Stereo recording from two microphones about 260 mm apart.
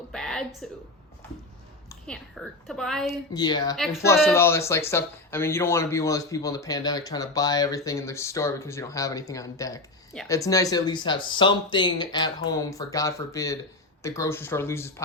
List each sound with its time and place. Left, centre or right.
0.1 s a sound: centre
1.9 s a woman's voice: centre
3.3 s speech: centre
3.8 s a woman's voice: centre